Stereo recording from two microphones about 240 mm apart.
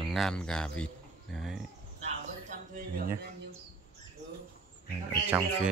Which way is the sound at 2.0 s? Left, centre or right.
Right.